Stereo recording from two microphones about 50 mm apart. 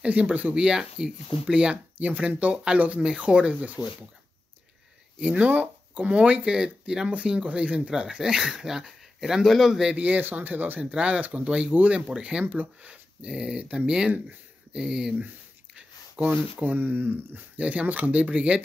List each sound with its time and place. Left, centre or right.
0.0 s speech: right
0.6 s speech: centre
2.0 s speech: right
5.2 s speech: right; by 9.8 s centre
9.8 s speech: right
10.4 s speech: right
12.2 s speech: right
15.1 s a sound: right
16.7 s speech: right
17.6 s speech: right